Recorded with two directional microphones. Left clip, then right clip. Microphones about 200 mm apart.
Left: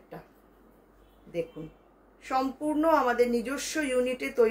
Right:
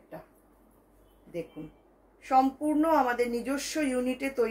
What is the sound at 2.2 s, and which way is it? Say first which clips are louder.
A woman's voice: right 4 dB; 20° left (ahead or behind).